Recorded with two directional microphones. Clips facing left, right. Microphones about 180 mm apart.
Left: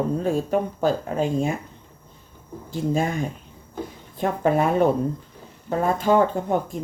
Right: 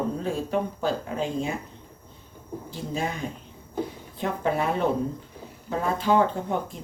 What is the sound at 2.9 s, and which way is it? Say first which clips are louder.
Speech: left 5 dB; 50° left (ahead or behind).